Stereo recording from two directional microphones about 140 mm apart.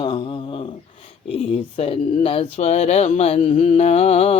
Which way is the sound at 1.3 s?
45° left (ahead or behind).